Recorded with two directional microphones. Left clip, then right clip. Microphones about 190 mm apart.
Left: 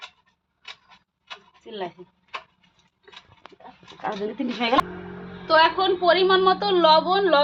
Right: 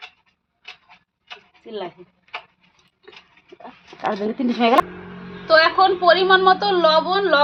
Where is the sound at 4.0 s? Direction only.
65° right (ahead or behind).